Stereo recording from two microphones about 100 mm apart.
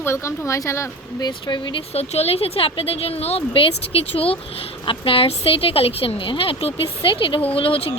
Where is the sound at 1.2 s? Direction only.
50° left (ahead or behind).